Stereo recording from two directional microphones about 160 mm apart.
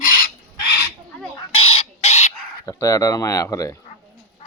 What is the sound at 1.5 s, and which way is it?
Chicken, 35° left (ahead or behind).